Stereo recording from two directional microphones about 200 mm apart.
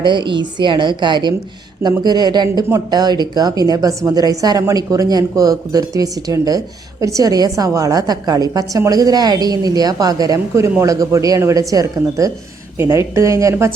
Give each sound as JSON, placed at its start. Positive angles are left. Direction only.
{"t": 0.0, "sound": "a woman's voice", "side_deg": -25}